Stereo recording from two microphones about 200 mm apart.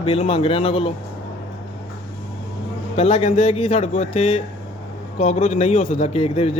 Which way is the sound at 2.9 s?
30° left (ahead or behind).